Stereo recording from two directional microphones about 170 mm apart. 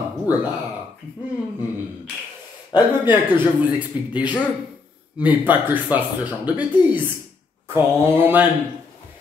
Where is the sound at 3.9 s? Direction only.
10° right (ahead or behind).